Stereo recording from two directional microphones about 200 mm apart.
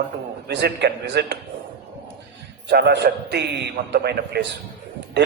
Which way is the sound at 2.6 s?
55° right (ahead or behind).